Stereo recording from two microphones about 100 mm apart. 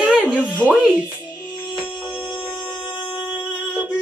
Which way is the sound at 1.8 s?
15° left (ahead or behind).